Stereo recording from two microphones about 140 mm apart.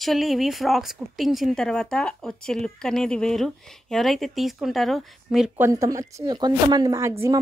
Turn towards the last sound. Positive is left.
turn(degrees=-20)  # may be behind; listen again after turning